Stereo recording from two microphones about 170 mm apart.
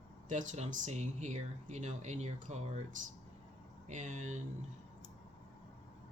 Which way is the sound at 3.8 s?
45° right (ahead or behind).